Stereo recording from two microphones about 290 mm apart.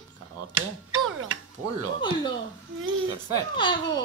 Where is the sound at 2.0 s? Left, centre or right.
Centre.